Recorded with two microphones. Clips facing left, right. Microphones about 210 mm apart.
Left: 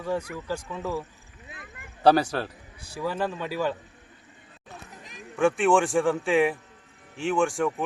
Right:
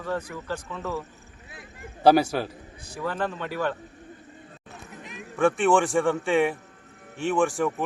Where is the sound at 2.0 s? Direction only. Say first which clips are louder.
Right 2 dB; 10° right (ahead or behind).